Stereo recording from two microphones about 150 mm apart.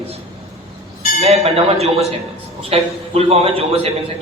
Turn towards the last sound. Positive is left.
turn(degrees=-40)  # may be behind; listen again after turning